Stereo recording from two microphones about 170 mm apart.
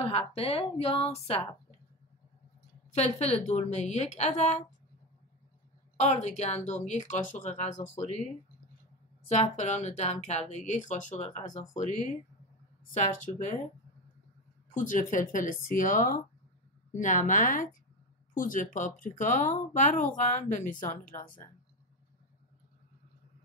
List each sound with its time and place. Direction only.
0.0 s a woman's voice: 35° left (ahead or behind)
2.9 s a woman's voice: 40° left (ahead or behind)
5.9 s speech: 40° left (ahead or behind)
9.3 s speech: 45° left (ahead or behind)
12.9 s speech: 45° left (ahead or behind)
14.7 s speech: 50° left (ahead or behind)